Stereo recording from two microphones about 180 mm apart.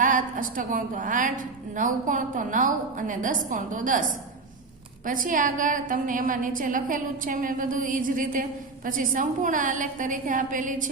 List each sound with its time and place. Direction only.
0.0 s a woman's voice: 45° right (ahead or behind)
5.0 s a woman's voice: 50° right (ahead or behind)